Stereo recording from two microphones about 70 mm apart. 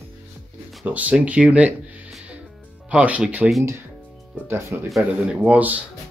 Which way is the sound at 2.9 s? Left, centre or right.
Centre.